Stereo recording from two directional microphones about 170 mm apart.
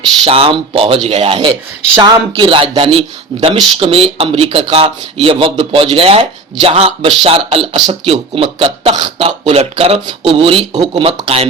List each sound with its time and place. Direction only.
0.3 s speech: 35° right (ahead or behind)